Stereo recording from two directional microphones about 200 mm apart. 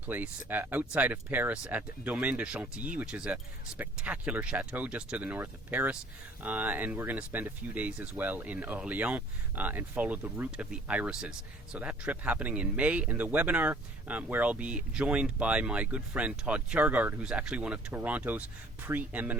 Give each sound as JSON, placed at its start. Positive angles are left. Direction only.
{"t": 0.1, "sound": "speech", "side_deg": -10}